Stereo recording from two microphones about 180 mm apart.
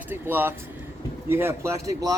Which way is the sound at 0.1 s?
10° right (ahead or behind).